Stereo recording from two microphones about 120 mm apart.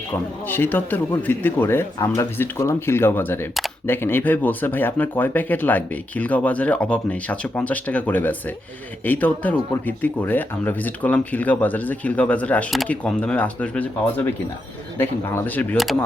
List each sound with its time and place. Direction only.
0.1 s speech: 15° left (ahead or behind)
14.9 s speech: 20° left (ahead or behind)